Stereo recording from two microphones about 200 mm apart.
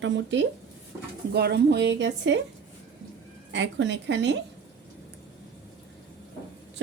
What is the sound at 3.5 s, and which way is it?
Speech, 65° right (ahead or behind).